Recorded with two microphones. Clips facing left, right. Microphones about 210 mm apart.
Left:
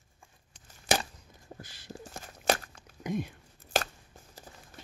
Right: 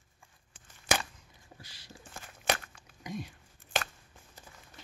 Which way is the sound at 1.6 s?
50° left (ahead or behind).